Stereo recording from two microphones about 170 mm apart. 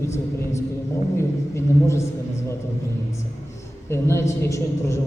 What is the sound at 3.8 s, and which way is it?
A man's voice, 15° left (ahead or behind).